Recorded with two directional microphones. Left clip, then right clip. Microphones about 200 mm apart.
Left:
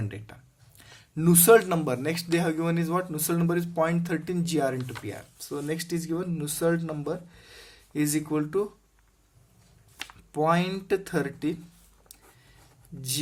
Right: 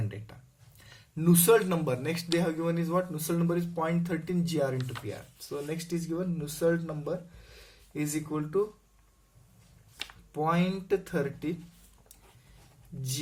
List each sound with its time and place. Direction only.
0.8 s speech: 45° left (ahead or behind)
10.3 s speech: 50° left (ahead or behind)